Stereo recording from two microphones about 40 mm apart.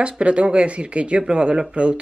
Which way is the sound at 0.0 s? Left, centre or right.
Right.